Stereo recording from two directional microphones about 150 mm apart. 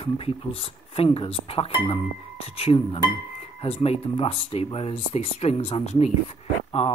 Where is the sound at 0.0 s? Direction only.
35° left (ahead or behind).